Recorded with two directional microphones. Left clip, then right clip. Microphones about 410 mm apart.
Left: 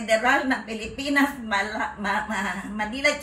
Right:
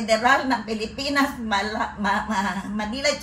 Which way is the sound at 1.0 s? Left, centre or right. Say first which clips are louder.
Left 1 dB; centre.